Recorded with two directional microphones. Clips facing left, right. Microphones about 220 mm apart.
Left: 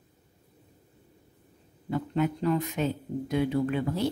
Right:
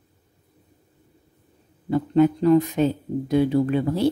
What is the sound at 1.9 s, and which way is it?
Speech, 35° right (ahead or behind).